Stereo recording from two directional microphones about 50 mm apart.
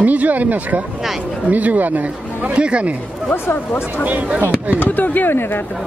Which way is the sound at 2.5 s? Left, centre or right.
Right.